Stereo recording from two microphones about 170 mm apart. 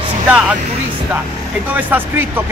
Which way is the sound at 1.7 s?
10° right (ahead or behind).